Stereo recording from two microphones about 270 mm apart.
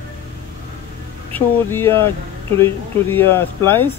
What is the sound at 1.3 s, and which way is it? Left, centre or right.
Speech, centre.